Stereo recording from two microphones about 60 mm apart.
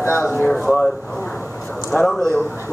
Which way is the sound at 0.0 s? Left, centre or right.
Left.